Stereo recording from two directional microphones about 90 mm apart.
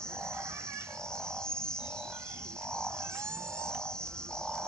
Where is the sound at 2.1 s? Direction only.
30° right (ahead or behind).